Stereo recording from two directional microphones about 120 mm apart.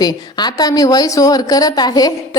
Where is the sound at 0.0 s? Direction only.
35° left (ahead or behind).